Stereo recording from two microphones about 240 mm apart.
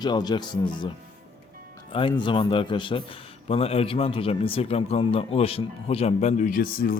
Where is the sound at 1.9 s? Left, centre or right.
Left.